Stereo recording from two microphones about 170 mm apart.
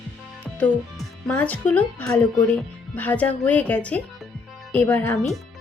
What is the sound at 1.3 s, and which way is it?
Speech, 10° left (ahead or behind).